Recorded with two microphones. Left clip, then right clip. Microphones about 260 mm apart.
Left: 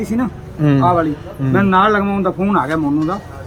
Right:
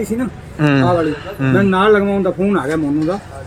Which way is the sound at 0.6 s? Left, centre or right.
Centre.